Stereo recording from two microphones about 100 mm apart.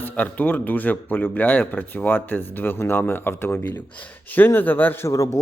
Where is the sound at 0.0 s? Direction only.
15° left (ahead or behind).